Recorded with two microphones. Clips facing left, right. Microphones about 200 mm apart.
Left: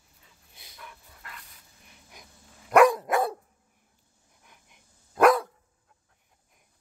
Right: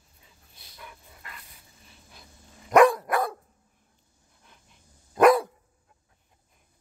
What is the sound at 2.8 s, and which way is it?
Dog, 20° left (ahead or behind).